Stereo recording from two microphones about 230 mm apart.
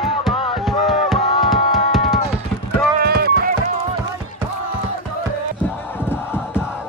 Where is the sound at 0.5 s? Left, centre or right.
Centre.